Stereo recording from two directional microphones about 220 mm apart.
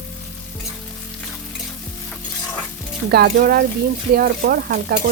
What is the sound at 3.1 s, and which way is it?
Frying, 45° right (ahead or behind).